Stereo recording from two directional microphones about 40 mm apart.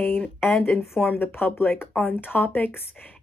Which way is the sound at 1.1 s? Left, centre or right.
Left.